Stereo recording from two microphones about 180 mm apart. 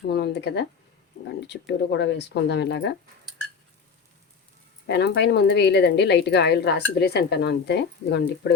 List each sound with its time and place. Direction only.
0.1 s speech: 65° left (ahead or behind)
4.9 s speech: 70° left (ahead or behind)